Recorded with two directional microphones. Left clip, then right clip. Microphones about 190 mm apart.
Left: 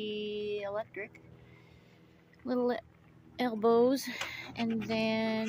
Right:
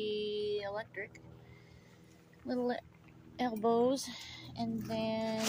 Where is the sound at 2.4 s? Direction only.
40° left (ahead or behind).